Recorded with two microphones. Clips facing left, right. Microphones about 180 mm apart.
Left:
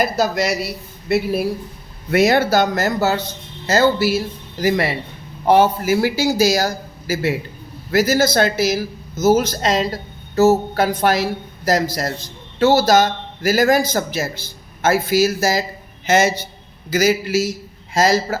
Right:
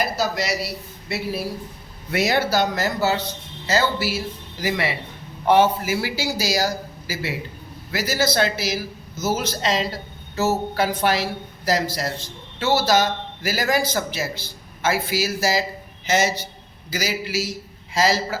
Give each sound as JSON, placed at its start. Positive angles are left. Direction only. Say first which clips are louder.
{"t": 0.0, "sound": "a man's voice", "louder": "left 5 dB", "side_deg": 50}